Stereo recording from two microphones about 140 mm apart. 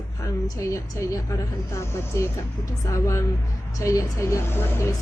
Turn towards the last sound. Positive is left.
turn(degrees=15)  # may be behind; listen again after turning